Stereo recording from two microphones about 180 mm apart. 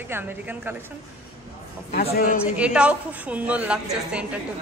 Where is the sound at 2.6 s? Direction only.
5° right (ahead or behind).